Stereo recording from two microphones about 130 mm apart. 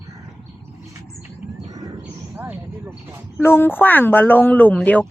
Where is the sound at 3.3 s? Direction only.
15° left (ahead or behind).